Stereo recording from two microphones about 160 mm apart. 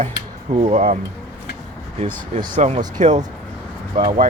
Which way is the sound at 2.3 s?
55° right (ahead or behind).